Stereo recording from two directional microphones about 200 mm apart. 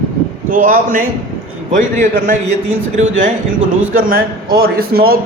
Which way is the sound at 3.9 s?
45° right (ahead or behind).